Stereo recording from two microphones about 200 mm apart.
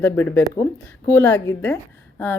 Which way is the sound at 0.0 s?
10° left (ahead or behind).